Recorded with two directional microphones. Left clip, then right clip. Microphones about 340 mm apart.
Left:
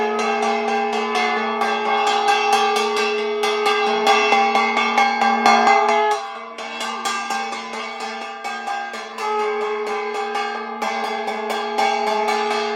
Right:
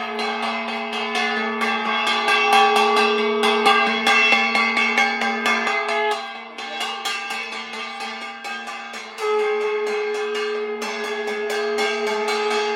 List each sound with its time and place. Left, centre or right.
0.2 s music: centre
3.8 s music: centre